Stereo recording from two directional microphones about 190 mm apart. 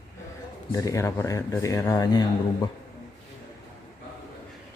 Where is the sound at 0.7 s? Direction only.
15° left (ahead or behind).